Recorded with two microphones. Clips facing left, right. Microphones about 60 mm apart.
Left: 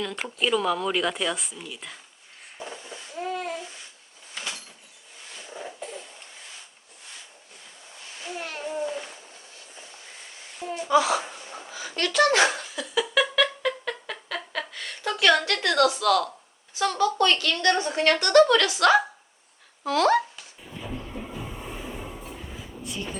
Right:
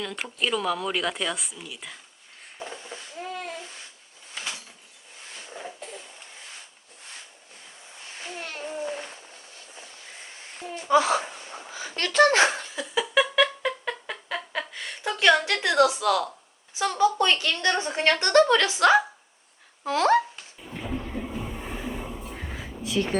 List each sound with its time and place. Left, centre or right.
0.0 s speech: centre
3.2 s a sound: centre
8.3 s babbling: centre
10.8 s a woman's voice: right
11.7 s a sound: right; by 15.1 s centre
15.2 s a woman's voice: centre
22.8 s a woman's voice: right